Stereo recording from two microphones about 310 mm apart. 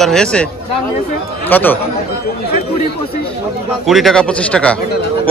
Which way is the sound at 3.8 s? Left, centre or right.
Centre.